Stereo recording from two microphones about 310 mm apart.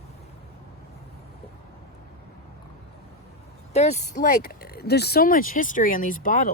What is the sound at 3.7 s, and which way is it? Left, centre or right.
Speech, left.